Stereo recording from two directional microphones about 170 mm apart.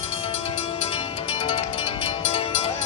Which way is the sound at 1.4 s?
35° left (ahead or behind).